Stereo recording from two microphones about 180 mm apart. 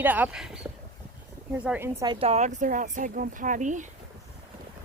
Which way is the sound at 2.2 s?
40° right (ahead or behind).